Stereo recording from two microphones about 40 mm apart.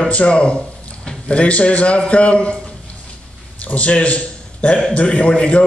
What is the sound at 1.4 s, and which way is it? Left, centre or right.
A man's voice, left.